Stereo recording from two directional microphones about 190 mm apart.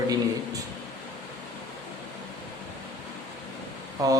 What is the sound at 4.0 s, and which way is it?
Speech, 20° right (ahead or behind).